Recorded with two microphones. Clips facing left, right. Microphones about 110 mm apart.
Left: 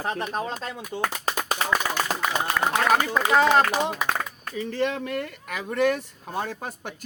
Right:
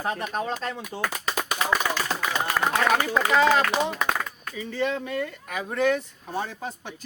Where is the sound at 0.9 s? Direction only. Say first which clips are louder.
Left 2 dB; 35° left (ahead or behind).